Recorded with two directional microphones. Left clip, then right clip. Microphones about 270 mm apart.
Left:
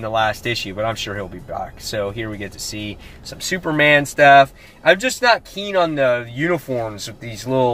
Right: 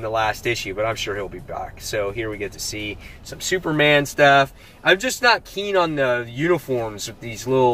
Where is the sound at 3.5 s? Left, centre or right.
Centre.